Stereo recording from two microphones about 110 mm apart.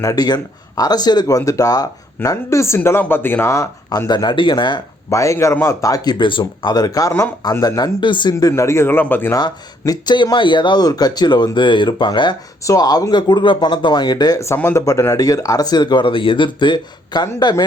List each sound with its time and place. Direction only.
0.0 s speech: 35° left (ahead or behind)
5.1 s speech: 30° left (ahead or behind)
9.3 s speech: 35° left (ahead or behind)